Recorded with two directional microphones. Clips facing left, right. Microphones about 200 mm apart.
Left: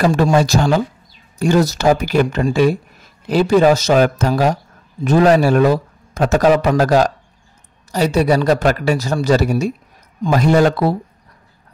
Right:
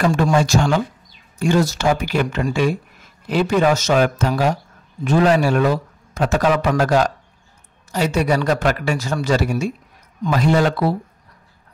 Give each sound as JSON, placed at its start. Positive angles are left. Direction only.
{"t": 0.0, "sound": "a man's voice", "side_deg": 35}